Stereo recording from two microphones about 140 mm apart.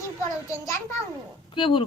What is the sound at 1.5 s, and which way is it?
Speech, 35° left (ahead or behind).